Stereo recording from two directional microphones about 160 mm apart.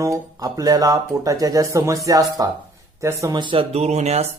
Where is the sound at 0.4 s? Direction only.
25° right (ahead or behind).